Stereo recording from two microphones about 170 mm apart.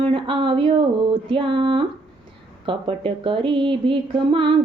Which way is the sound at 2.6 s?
30° right (ahead or behind).